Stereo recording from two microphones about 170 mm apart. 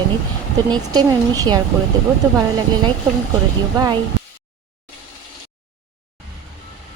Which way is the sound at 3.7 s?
25° right (ahead or behind).